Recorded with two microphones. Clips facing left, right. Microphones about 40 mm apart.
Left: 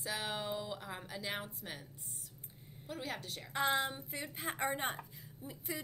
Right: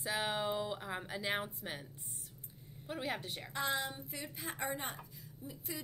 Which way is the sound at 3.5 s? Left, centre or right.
Left.